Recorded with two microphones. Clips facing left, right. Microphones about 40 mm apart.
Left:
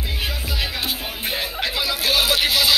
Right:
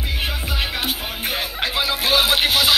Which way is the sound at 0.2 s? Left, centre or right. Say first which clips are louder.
Right 1 dB; right.